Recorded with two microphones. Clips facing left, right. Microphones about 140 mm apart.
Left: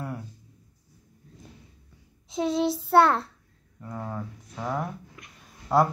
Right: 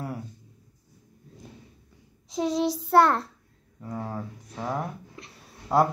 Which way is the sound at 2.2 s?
Centre (ahead or behind).